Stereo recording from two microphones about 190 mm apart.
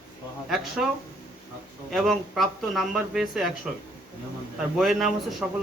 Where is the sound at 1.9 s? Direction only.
Centre (ahead or behind).